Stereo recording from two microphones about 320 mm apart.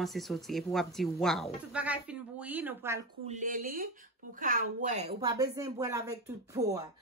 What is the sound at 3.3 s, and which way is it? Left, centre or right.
A woman's voice, right.